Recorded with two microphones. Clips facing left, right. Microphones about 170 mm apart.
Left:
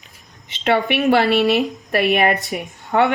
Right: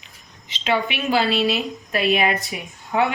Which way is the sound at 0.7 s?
65° left (ahead or behind).